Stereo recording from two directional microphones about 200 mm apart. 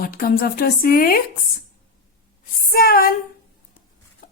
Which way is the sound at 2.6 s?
50° left (ahead or behind).